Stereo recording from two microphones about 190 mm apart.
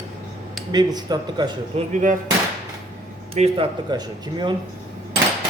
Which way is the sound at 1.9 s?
40° right (ahead or behind).